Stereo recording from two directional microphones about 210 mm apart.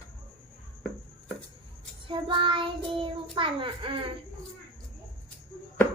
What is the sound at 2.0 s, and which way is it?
Child singing, 25° right (ahead or behind).